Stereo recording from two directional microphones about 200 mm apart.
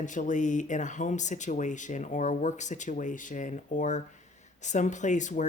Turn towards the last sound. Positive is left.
turn(degrees=40)  # may be behind; listen again after turning